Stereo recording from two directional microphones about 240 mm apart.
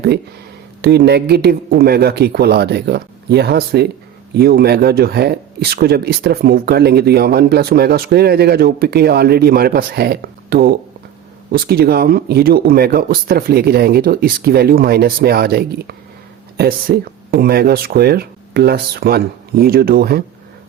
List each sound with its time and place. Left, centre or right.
0.8 s speech: right